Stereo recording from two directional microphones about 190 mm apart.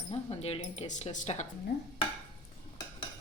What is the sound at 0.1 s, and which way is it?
A woman's voice, 30° left (ahead or behind).